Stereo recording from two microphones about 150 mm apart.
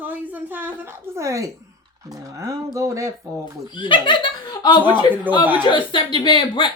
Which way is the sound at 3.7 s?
30° left (ahead or behind).